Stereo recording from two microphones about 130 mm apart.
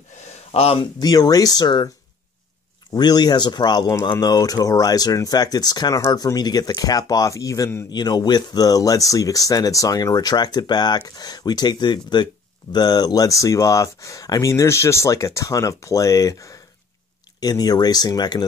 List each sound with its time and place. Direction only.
0.5 s speech: 50° left (ahead or behind)
0.9 s speech: 30° left (ahead or behind)
2.9 s speech: 35° left (ahead or behind)